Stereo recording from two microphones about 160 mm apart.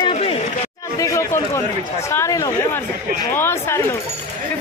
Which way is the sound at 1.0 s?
20° left (ahead or behind).